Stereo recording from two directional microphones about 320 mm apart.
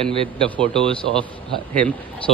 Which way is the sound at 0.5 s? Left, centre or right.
Centre.